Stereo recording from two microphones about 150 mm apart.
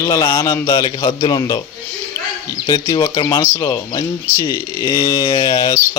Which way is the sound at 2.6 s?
25° left (ahead or behind).